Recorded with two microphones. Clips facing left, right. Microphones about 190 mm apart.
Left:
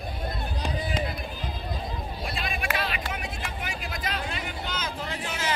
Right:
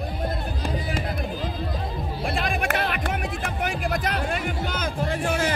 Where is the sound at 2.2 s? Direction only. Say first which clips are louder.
Right 8 dB; 55° right (ahead or behind).